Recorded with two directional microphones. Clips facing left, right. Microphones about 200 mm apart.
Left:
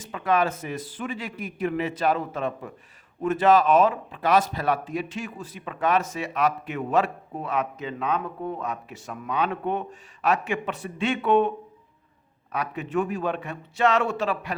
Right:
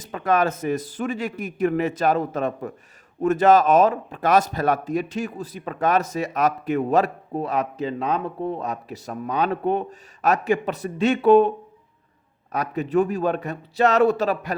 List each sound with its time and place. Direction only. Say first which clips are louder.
0.0 s a man's voice: right 2 dB; 45° right (ahead or behind)